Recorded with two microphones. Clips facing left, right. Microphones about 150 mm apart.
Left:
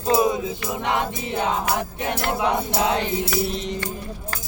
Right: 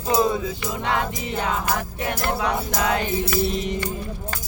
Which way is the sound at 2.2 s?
25° left (ahead or behind).